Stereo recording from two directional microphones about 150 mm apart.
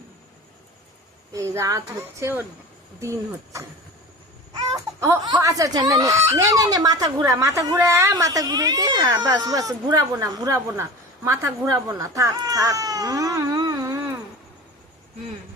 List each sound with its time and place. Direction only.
1.3 s speech: 20° right (ahead or behind)
4.5 s baby cry: 20° right (ahead or behind)
5.2 s speech: 25° right (ahead or behind)